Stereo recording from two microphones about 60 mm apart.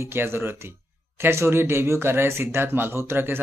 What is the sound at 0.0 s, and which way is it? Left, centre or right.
Speech, right.